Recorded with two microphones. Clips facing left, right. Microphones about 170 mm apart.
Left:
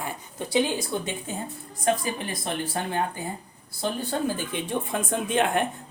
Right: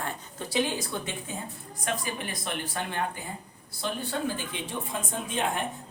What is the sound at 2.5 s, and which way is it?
A woman's voice, 30° left (ahead or behind).